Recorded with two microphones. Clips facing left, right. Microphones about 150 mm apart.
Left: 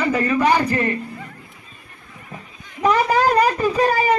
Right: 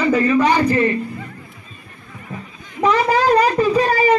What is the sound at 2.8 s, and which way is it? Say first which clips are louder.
Speech: right 1 dB; 50° left (ahead or behind).